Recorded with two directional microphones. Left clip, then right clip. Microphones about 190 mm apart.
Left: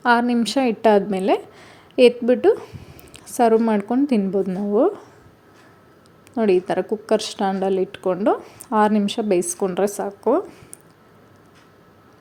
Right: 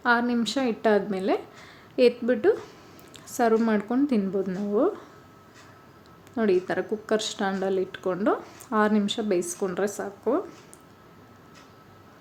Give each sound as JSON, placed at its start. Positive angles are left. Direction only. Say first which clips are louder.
{"t": 0.0, "sound": "a woman's voice", "louder": "left 6 dB", "side_deg": 30}
{"t": 6.3, "sound": "a woman's voice", "louder": "left 6 dB", "side_deg": 25}